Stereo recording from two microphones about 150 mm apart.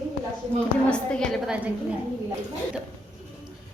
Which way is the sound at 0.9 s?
5° left (ahead or behind).